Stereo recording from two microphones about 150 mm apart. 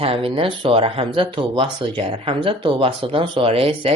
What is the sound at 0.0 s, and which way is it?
Speech, 40° right (ahead or behind).